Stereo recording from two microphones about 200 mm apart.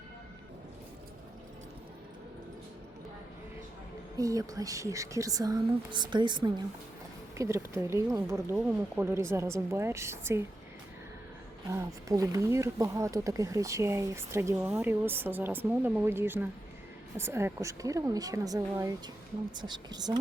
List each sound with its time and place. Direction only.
4.2 s speech: 15° right (ahead or behind)
11.7 s speech: 15° right (ahead or behind)